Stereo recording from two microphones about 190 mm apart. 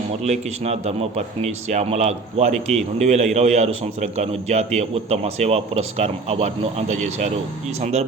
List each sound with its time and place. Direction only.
0.3 s speech: 35° right (ahead or behind)